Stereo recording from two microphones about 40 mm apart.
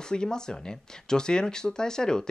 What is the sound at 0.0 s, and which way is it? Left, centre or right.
Speech, centre.